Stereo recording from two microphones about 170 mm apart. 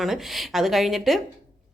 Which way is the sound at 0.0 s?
Centre (ahead or behind).